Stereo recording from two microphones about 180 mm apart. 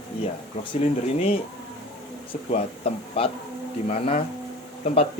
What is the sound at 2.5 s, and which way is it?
Speech, 30° left (ahead or behind).